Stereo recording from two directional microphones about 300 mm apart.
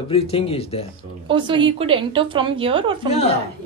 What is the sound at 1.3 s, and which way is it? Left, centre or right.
A woman's voice, centre.